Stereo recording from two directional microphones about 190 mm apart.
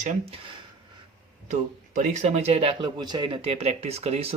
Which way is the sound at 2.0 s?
40° right (ahead or behind).